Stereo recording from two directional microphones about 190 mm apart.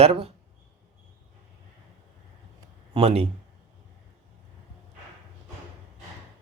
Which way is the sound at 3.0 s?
30° right (ahead or behind).